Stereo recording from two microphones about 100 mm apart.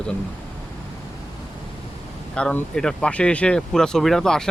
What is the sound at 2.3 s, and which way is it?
Speech, 10° left (ahead or behind).